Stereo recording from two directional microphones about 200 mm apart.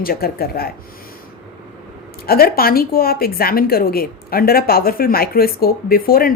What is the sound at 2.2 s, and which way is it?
A woman's voice, 50° left (ahead or behind).